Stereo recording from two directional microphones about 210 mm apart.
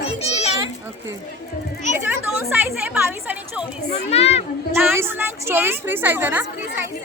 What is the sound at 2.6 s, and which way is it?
A woman's voice, 10° right (ahead or behind).